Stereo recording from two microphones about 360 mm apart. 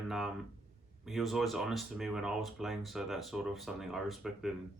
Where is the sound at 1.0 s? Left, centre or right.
Centre.